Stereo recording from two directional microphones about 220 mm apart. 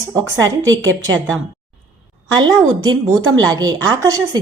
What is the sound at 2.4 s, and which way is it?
A woman's voice, 20° right (ahead or behind).